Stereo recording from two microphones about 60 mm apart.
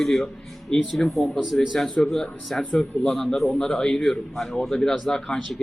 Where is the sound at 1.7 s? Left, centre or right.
Centre.